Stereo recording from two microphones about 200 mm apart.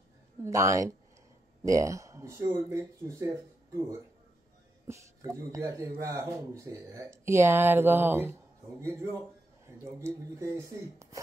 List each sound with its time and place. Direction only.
0.4 s speech: 15° right (ahead or behind)
4.8 s speech: 15° right (ahead or behind)
9.7 s speech: 15° right (ahead or behind)